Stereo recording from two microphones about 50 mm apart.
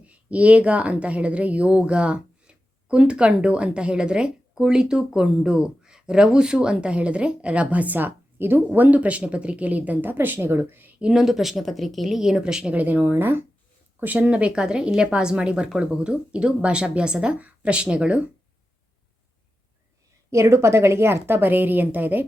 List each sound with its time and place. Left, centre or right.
0.0 s speech: right
11.0 s speech: centre
12.7 s speech: right
14.3 s speech: right
20.3 s a woman's voice: right